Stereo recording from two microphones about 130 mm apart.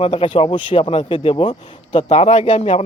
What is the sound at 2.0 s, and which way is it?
Speech, 55° left (ahead or behind).